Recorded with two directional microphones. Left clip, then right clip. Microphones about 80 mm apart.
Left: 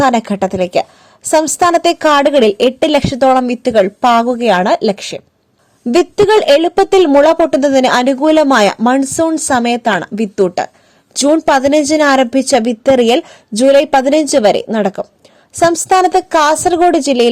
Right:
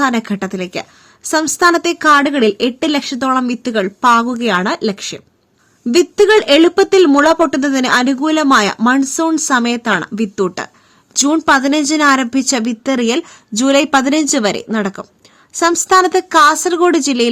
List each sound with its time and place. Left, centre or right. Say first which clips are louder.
0.0 s speech: left 5 dB; left
6.1 s speech: left 1 dB; left
11.4 s speech: left 2 dB; left
15.5 s speech: left 1 dB; left